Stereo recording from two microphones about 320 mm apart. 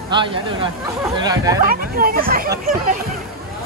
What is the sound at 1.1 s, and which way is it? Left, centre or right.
Speech, centre.